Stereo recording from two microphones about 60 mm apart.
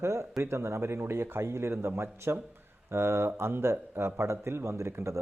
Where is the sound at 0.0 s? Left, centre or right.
Right.